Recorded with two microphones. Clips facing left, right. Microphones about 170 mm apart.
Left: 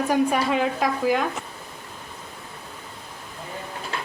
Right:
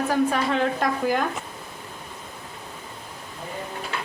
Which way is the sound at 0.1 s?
10° left (ahead or behind).